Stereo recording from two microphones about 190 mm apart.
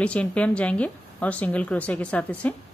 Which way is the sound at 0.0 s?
5° left (ahead or behind).